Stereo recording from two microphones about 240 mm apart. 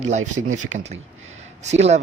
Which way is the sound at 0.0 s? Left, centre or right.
Right.